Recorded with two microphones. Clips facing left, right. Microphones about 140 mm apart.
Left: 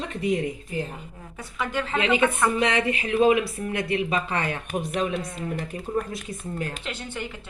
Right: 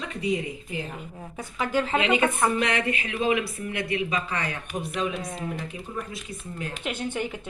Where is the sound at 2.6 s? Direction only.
25° left (ahead or behind).